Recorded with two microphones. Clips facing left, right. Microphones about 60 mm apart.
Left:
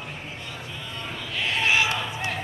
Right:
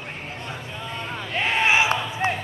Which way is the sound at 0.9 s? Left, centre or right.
Right.